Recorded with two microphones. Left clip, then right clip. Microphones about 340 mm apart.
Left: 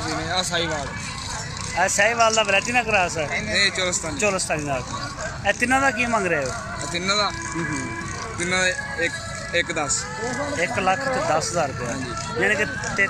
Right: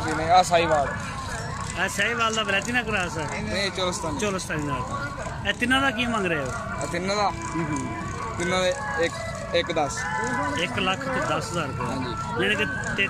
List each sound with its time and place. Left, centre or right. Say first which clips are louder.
0.3 s speech: right 7 dB; right
1.8 s speech: left 6 dB; centre
3.5 s speech: left 5 dB; centre
4.2 s speech: left 5 dB; centre
6.9 s speech: left 4 dB; right
8.4 s speech: left 2 dB; centre
10.8 s speech: left 6 dB; centre